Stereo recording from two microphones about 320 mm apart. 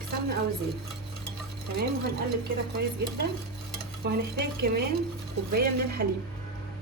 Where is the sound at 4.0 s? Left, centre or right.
Right.